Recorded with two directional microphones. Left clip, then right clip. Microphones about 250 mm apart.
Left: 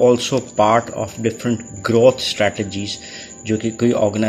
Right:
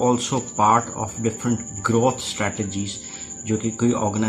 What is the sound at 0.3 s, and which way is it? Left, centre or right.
Speech, centre.